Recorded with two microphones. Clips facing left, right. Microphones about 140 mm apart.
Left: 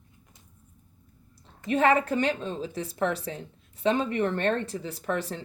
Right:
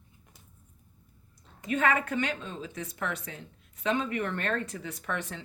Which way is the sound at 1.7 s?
30° left (ahead or behind).